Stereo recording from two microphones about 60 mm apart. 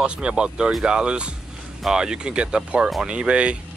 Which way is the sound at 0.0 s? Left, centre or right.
Centre.